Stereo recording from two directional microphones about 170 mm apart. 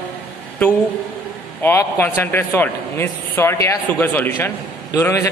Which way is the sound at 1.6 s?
15° left (ahead or behind).